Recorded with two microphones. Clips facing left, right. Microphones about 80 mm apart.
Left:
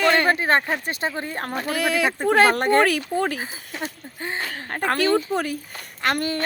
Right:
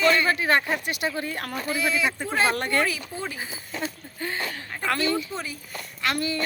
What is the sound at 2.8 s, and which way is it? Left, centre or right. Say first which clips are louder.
Speech: left 8 dB; left.